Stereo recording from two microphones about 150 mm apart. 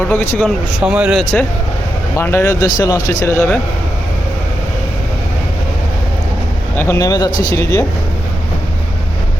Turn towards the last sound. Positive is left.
turn(degrees=20)  # may be behind; listen again after turning